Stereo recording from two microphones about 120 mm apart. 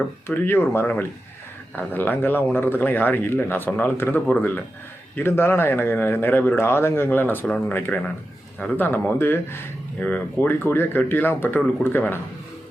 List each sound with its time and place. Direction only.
0.3 s speech: 20° left (ahead or behind)